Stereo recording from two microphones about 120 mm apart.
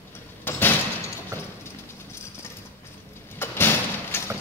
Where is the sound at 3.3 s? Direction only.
20° left (ahead or behind).